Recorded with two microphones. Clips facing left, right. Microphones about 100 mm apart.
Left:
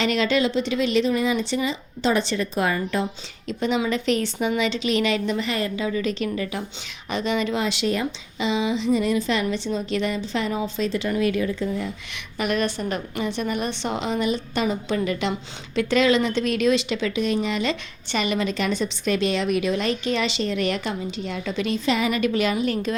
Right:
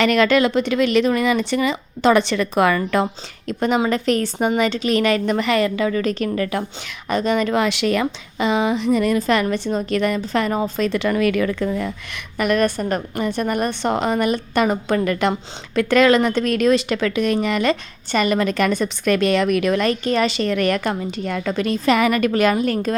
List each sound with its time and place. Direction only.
0.0 s speech: 60° right (ahead or behind)
3.4 s a woman's voice: 50° right (ahead or behind)